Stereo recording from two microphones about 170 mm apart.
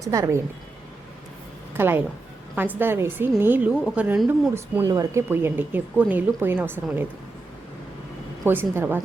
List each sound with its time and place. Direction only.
0.0 s a woman's voice: 20° right (ahead or behind)
1.7 s speech: 15° right (ahead or behind)
8.4 s speech: 10° right (ahead or behind)